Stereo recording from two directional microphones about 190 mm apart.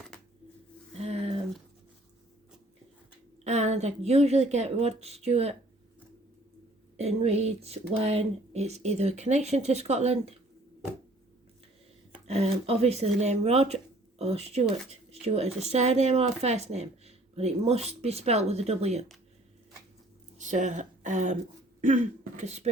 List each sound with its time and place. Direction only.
0.9 s a sound: 35° right (ahead or behind)
3.4 s speech: 35° right (ahead or behind)
6.9 s speech: 35° right (ahead or behind)
12.3 s speech: 35° right (ahead or behind)
20.4 s speech: 40° right (ahead or behind)